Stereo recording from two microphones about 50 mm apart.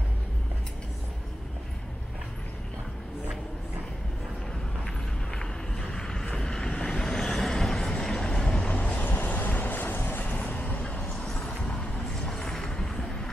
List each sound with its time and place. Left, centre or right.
5.8 s vehicle: centre; by 10.8 s left
11.3 s vehicle: left
12.2 s music: centre